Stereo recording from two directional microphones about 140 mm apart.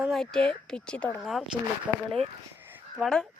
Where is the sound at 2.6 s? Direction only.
15° right (ahead or behind).